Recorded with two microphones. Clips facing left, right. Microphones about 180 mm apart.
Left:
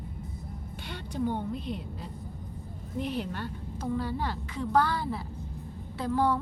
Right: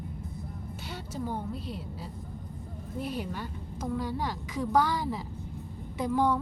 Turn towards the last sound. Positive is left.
turn(degrees=-15)  # may be behind; listen again after turning